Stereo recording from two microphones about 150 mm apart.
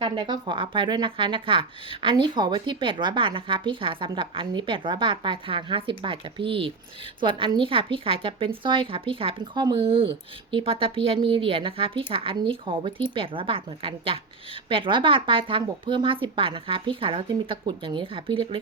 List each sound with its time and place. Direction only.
0.0 s speech: 30° right (ahead or behind)